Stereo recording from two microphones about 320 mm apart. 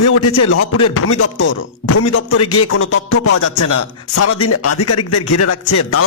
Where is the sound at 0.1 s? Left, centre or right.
Left.